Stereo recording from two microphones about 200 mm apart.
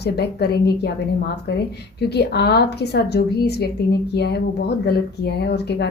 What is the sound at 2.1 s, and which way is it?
A woman's voice, 55° left (ahead or behind).